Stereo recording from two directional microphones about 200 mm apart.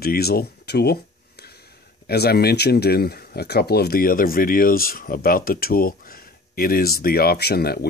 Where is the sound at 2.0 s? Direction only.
50° left (ahead or behind).